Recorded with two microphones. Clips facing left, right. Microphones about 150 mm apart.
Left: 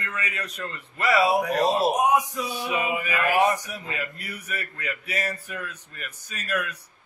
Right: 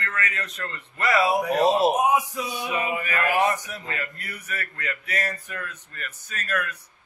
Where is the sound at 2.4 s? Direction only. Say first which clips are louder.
Even; 5° left (ahead or behind).